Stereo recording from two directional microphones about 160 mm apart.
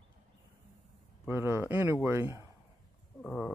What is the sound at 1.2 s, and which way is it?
Speech, 15° right (ahead or behind).